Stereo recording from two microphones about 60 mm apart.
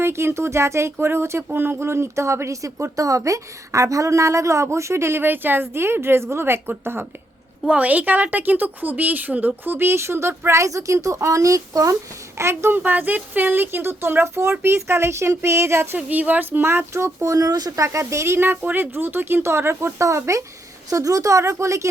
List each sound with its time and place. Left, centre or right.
0.0 s a woman's voice: right
5.2 s speech: right
7.7 s a woman's voice: right
9.9 s a woman's voice: right
12.4 s speech: right
12.8 s speech: right
16.0 s a woman's voice: right
16.6 s speech: right
17.3 s speech: right
18.0 s speech: right
18.5 s speech: right
20.9 s a woman's voice: right